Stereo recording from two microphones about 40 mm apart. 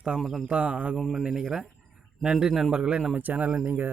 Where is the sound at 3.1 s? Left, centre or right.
Right.